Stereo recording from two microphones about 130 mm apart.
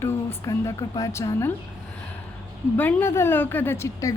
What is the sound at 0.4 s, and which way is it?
Speech, 25° left (ahead or behind).